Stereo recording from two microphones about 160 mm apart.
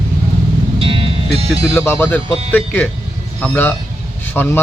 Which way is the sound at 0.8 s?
35° right (ahead or behind).